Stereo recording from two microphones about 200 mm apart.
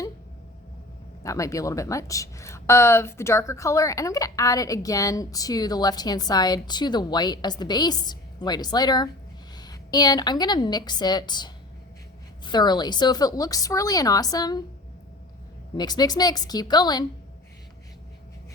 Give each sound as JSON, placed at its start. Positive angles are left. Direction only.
{"t": 1.2, "sound": "a woman's voice", "side_deg": 15}
{"t": 15.7, "sound": "speech", "side_deg": 20}